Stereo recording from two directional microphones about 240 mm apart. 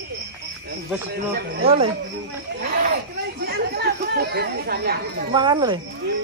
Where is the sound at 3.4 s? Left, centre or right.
Right.